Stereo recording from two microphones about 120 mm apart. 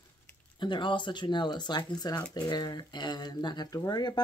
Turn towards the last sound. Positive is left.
turn(degrees=35)  # may be behind; listen again after turning